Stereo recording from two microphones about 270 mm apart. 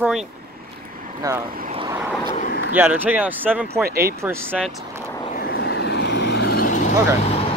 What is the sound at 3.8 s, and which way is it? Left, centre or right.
Speech, right.